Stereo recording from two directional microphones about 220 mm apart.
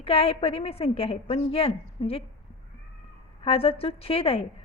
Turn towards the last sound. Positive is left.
turn(degrees=25)  # may be behind; listen again after turning